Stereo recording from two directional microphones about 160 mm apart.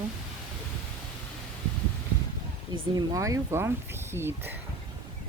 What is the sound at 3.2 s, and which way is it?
Speech, 20° right (ahead or behind).